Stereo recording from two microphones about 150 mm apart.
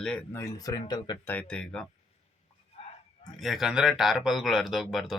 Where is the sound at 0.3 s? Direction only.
20° left (ahead or behind).